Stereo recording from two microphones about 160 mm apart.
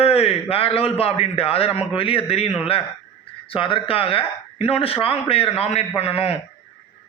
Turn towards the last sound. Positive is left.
turn(degrees=35)  # may be behind; listen again after turning